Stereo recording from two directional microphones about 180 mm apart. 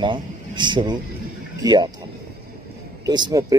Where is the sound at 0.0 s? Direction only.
25° right (ahead or behind).